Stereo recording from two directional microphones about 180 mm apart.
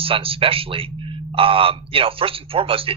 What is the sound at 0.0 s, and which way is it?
Speech, 30° right (ahead or behind).